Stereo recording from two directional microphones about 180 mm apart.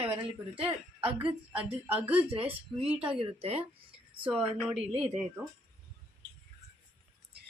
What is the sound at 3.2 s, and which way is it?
Speech, 35° right (ahead or behind).